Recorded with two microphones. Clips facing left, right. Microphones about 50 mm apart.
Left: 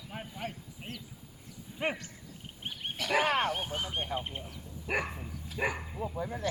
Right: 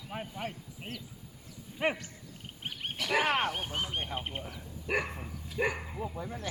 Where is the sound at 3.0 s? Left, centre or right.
Centre.